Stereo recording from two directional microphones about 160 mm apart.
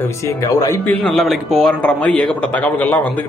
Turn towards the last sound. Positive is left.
turn(degrees=10)  # may be behind; listen again after turning